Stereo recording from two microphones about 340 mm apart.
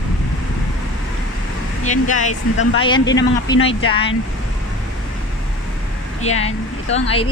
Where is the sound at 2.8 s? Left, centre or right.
Centre.